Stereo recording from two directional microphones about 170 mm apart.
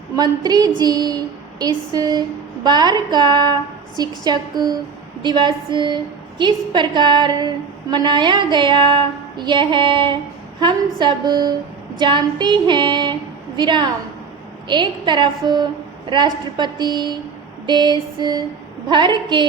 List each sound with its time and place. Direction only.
0.2 s a woman's voice: 25° right (ahead or behind)